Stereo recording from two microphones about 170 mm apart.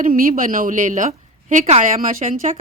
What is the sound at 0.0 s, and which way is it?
A woman's voice, 55° right (ahead or behind).